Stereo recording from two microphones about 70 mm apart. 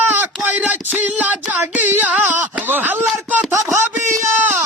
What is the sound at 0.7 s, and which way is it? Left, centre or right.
Music, right.